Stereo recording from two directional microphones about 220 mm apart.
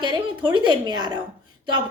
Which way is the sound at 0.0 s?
20° right (ahead or behind).